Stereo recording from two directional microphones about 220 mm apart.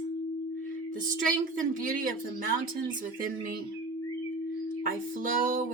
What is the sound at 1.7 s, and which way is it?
Speech, 40° right (ahead or behind).